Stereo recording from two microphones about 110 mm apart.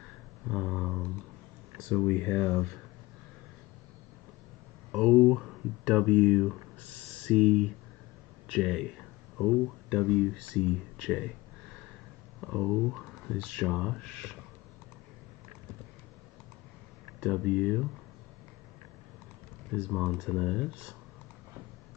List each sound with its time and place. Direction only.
0.5 s a sound: centre (ahead or behind)
2.0 s speech: 15° left (ahead or behind)
4.9 s speech: 5° right (ahead or behind)
12.4 s speech: centre (ahead or behind)
17.2 s speech: centre (ahead or behind)
19.7 s speech: 5° right (ahead or behind)